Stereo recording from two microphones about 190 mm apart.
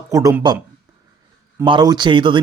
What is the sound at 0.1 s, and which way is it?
Speech, 15° right (ahead or behind).